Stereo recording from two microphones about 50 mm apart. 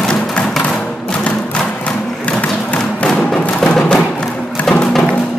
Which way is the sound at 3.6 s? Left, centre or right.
Centre.